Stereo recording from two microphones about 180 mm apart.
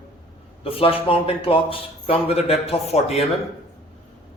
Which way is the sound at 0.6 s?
30° left (ahead or behind).